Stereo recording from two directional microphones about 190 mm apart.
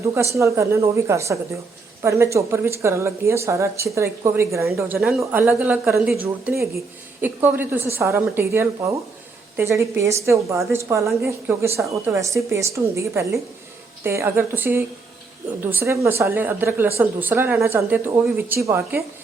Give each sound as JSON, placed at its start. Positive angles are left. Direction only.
{"t": 0.3, "sound": "a woman's voice", "side_deg": -15}
{"t": 4.9, "sound": "a woman's voice", "side_deg": 0}